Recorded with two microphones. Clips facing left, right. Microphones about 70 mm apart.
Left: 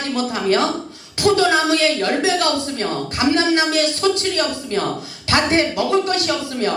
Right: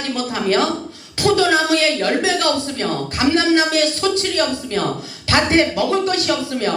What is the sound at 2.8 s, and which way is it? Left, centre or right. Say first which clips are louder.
Speech: right 1 dB; left.